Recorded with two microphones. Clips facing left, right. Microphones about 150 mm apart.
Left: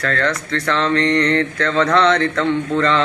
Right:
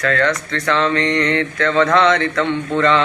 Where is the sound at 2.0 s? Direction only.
35° left (ahead or behind).